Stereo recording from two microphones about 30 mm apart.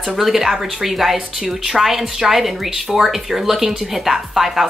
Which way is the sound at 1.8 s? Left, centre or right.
Centre.